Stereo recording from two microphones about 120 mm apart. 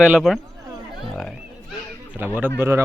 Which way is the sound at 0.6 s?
30° right (ahead or behind).